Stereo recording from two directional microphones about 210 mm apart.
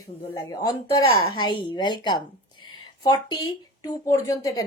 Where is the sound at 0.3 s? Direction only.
20° left (ahead or behind).